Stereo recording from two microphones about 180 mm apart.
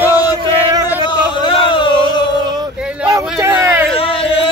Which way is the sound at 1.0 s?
25° left (ahead or behind).